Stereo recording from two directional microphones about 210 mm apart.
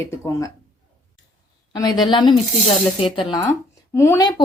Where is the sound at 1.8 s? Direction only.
20° left (ahead or behind).